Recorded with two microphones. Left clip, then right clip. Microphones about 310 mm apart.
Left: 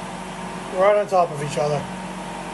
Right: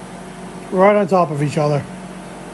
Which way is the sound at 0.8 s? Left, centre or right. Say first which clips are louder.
Right 3 dB; right.